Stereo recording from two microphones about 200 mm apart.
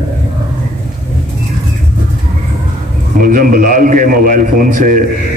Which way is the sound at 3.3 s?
45° right (ahead or behind).